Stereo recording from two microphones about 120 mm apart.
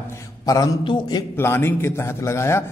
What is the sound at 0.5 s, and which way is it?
Speech, 35° left (ahead or behind).